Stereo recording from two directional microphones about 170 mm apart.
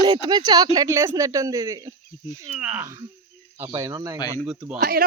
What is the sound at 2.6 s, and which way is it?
Speech, 5° right (ahead or behind).